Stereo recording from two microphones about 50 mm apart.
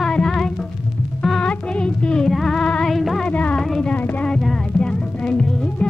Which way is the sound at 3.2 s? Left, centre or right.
Left.